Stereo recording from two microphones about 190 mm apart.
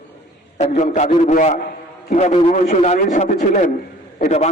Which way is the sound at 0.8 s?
40° left (ahead or behind).